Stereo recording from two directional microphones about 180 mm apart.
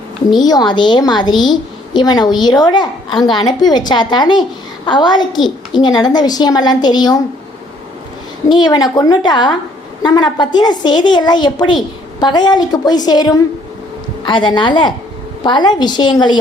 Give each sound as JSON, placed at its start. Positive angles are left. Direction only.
{"t": 0.3, "sound": "a woman's voice", "side_deg": 20}
{"t": 8.4, "sound": "a woman's voice", "side_deg": 25}